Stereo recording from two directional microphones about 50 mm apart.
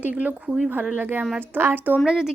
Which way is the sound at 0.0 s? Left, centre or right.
Right.